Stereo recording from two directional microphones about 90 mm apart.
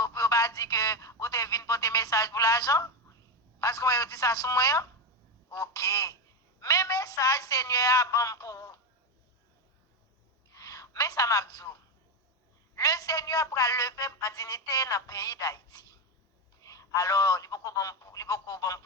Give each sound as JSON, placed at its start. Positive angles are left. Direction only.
{"t": 0.0, "sound": "telephone", "side_deg": 35}
{"t": 3.6, "sound": "speech", "side_deg": 40}
{"t": 10.5, "sound": "a woman's voice", "side_deg": 40}